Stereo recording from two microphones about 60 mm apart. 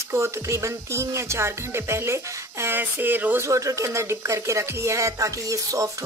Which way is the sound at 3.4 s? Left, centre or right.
Right.